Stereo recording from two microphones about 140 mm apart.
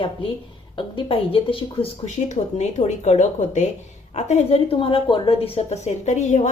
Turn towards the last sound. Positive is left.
turn(degrees=55)  # may be behind; listen again after turning